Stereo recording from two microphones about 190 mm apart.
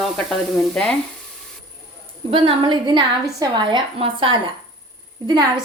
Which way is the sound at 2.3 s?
25° right (ahead or behind).